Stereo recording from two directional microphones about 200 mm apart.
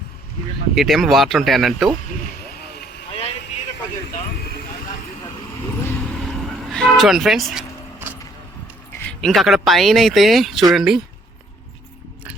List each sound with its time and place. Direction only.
0.8 s speech: centre (ahead or behind)
2.5 s vehicle: 50° left (ahead or behind)
3.1 s vehicle: 30° left (ahead or behind)
4.4 s vehicle: 55° left (ahead or behind)
6.2 s vehicle: centre (ahead or behind)
9.0 s speech: 5° left (ahead or behind)